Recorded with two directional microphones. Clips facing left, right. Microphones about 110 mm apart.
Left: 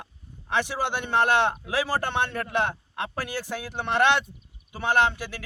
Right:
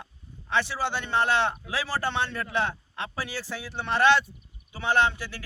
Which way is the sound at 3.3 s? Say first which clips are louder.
Left 3 dB; 15° left (ahead or behind).